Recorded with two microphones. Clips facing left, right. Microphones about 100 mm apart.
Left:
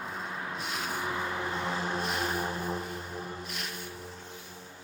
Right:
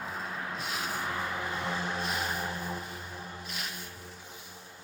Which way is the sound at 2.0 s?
Centre (ahead or behind).